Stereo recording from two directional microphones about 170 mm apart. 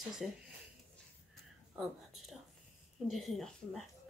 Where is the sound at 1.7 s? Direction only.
Centre (ahead or behind).